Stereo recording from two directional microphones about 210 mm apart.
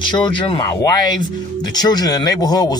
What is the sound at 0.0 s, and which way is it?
Speech, 20° left (ahead or behind).